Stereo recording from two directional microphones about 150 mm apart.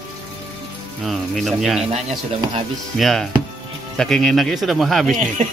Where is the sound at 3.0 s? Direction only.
Centre (ahead or behind).